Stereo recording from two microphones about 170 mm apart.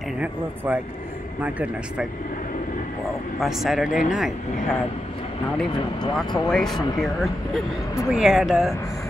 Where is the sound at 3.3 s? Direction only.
Centre (ahead or behind).